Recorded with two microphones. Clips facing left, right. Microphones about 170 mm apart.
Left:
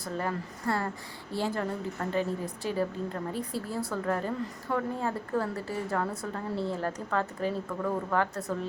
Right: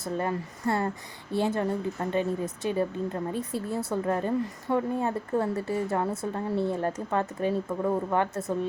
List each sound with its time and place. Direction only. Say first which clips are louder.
0.0 s a woman's voice: right 3 dB; 25° right (ahead or behind)